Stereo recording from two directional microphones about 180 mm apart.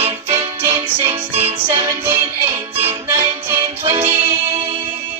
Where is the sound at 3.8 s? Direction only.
30° right (ahead or behind).